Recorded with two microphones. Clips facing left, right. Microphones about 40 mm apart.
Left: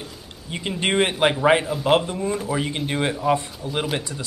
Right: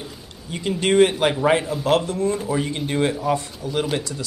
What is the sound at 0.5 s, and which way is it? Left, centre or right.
Speech, left.